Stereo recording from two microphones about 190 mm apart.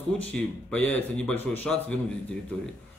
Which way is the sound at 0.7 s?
5° left (ahead or behind).